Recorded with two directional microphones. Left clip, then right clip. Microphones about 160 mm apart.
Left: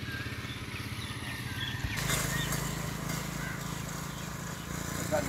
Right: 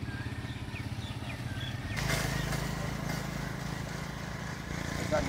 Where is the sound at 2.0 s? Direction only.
65° left (ahead or behind).